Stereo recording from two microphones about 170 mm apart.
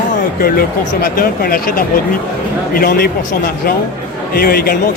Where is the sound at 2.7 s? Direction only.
60° left (ahead or behind).